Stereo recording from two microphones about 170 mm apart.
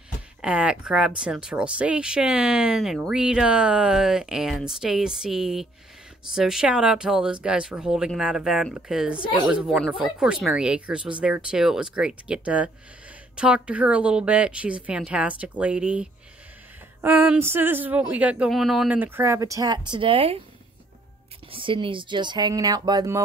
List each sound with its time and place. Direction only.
0.4 s speech: 5° right (ahead or behind); by 20.4 s 35° right (ahead or behind)
21.5 s speech: 30° right (ahead or behind)